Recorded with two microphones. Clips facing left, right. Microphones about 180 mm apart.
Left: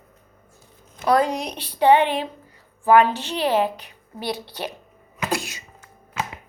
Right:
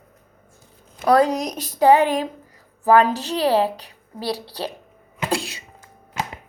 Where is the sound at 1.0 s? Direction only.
35° right (ahead or behind).